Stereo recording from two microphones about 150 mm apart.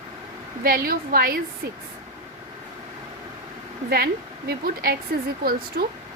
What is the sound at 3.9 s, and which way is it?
A woman's voice, 90° right.